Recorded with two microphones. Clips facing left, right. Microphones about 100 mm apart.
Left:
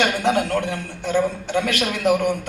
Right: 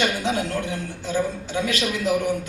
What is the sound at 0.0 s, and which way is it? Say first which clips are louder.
A man's voice: left 4 dB; 60° left (ahead or behind).